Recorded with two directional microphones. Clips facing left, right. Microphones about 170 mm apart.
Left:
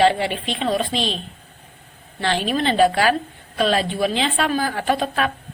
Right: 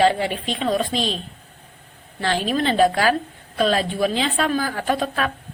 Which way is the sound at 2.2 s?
40° right (ahead or behind).